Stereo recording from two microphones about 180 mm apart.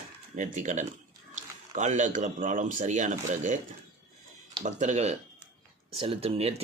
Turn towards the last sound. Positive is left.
turn(degrees=-30)  # may be behind; listen again after turning